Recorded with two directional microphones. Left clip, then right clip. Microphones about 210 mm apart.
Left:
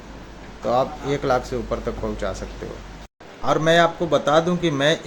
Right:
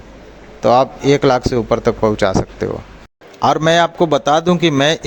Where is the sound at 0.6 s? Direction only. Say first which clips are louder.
Right 9 dB; 45° right (ahead or behind).